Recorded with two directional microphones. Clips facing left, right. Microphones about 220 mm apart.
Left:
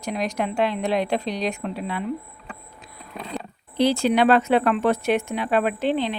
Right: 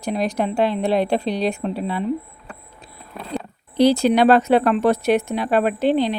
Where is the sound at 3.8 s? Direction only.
40° right (ahead or behind).